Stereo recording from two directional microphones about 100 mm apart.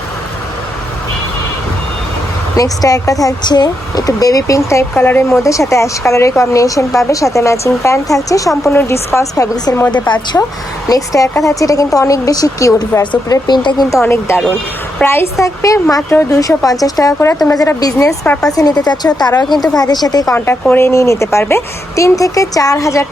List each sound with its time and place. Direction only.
2.6 s speech: 35° left (ahead or behind)
5.4 s speech: 30° left (ahead or behind)
10.3 s speech: 15° left (ahead or behind)
10.8 s speech: 35° left (ahead or behind)
13.2 s speech: 45° left (ahead or behind)
13.9 s speech: 25° left (ahead or behind)
18.3 s speech: 10° left (ahead or behind)
18.5 s speech: 40° left (ahead or behind)
20.3 s speech: 25° left (ahead or behind)